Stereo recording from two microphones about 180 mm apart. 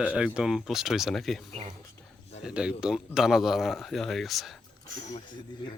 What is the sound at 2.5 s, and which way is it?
Speech, 5° right (ahead or behind).